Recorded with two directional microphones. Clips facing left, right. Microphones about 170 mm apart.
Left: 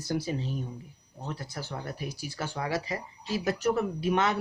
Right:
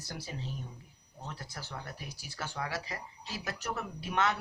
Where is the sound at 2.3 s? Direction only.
15° left (ahead or behind).